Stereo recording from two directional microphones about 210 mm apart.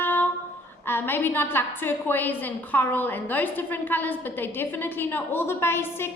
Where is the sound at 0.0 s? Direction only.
10° left (ahead or behind).